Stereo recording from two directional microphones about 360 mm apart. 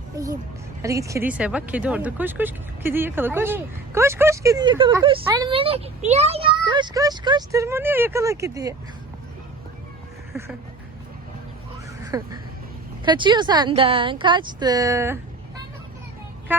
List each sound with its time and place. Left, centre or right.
0.8 s speech: centre
12.1 s speech: centre
16.5 s speech: centre